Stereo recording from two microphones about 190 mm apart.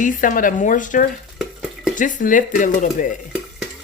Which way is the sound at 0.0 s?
45° left (ahead or behind).